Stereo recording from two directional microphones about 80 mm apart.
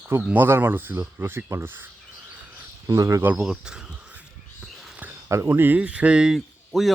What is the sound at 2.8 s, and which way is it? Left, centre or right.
Speech, right.